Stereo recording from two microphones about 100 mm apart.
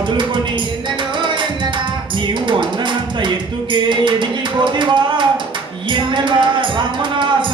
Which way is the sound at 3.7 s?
55° right (ahead or behind).